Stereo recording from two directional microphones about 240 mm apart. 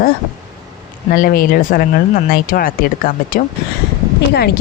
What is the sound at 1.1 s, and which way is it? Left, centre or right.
Speech, left.